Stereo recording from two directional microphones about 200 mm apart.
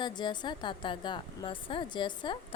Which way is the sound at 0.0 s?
20° left (ahead or behind).